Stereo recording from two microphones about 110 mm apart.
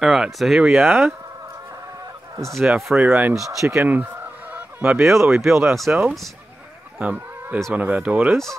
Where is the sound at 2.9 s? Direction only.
15° right (ahead or behind).